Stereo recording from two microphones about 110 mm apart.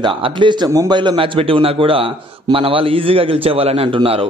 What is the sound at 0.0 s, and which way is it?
A man's voice, 50° right (ahead or behind).